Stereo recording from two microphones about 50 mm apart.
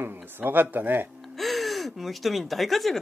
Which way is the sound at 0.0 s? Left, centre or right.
Right.